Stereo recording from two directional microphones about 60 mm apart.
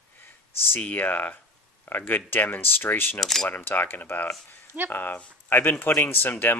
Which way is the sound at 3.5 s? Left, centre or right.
Left.